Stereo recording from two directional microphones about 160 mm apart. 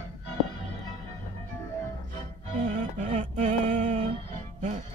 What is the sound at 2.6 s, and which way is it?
Music, 45° right (ahead or behind).